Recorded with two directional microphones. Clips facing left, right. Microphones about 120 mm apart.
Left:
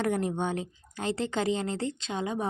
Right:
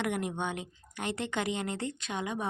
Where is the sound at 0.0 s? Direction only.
35° left (ahead or behind).